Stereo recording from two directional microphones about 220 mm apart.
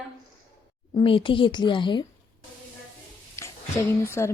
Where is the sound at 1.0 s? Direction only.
25° left (ahead or behind).